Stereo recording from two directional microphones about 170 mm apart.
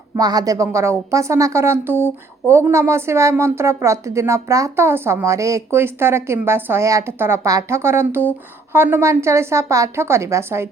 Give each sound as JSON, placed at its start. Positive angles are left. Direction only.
{"t": 0.2, "sound": "a woman's voice", "side_deg": -20}